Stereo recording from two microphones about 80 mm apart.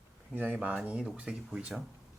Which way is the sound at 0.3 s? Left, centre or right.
Centre.